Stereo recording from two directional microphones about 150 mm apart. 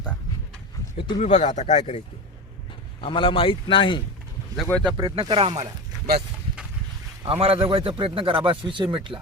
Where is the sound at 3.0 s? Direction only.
35° left (ahead or behind).